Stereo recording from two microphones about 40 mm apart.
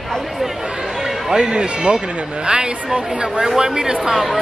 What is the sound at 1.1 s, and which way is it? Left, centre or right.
A woman's voice, centre.